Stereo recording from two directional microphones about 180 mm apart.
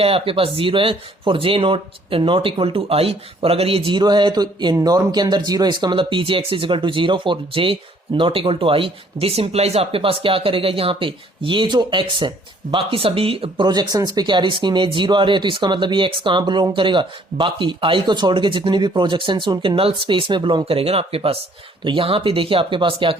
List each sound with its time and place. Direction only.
0.0 s speech: 30° right (ahead or behind)